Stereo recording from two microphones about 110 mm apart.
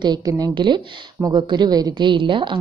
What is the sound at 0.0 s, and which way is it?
A woman's voice, 35° right (ahead or behind).